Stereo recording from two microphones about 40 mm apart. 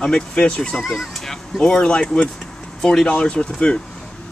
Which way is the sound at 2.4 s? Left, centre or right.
Centre.